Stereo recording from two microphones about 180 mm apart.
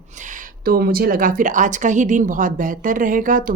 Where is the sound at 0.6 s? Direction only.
55° right (ahead or behind).